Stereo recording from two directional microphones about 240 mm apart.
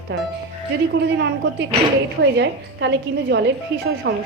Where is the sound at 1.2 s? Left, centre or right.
Right.